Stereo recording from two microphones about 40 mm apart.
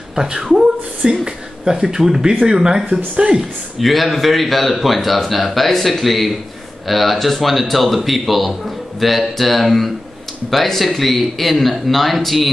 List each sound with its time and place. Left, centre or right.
0.1 s speech: centre
3.8 s speech: centre